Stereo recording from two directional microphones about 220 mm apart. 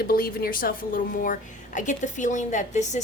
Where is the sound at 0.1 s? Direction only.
40° left (ahead or behind).